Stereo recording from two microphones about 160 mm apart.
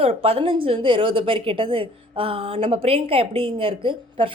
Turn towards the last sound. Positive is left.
turn(degrees=-35)  # may be behind; listen again after turning